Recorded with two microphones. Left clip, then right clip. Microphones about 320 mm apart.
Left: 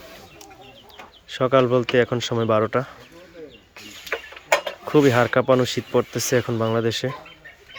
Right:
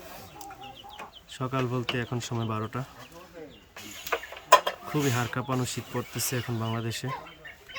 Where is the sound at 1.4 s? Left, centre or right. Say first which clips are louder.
Left 14 dB; centre.